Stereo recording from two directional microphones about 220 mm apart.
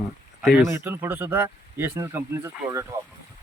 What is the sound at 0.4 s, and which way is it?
Speech, centre (ahead or behind).